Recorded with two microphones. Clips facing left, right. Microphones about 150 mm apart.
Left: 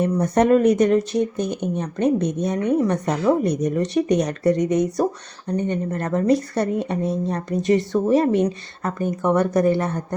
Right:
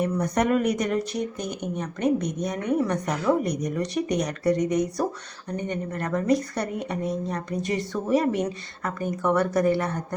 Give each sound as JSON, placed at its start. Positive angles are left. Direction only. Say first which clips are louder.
{"t": 0.2, "sound": "speech", "louder": "left 9 dB", "side_deg": 30}